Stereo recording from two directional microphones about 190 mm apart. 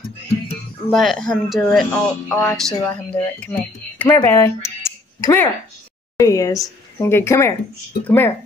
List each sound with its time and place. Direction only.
0.8 s speech: centre (ahead or behind)